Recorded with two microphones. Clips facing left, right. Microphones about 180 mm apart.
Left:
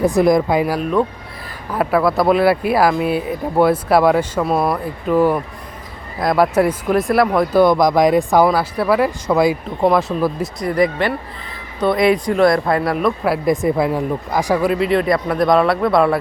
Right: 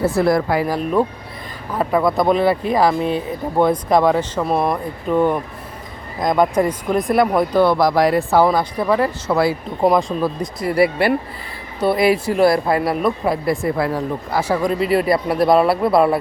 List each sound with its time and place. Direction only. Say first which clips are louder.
0.0 s speech: left 3 dB; 15° left (ahead or behind); by 7.6 s centre (ahead or behind)
7.6 s speech: left 3 dB; 15° left (ahead or behind)
8.4 s speech: left 1 dB; 5° left (ahead or behind)
9.8 s speech: left 1 dB; centre (ahead or behind)
10.6 s speech: right 1 dB; 5° right (ahead or behind)
12.5 s speech: left 1 dB; 25° right (ahead or behind)
12.8 s speech: left 1 dB; centre (ahead or behind)
13.4 s speech: left 3 dB; 20° left (ahead or behind); by 16.0 s 5° right (ahead or behind)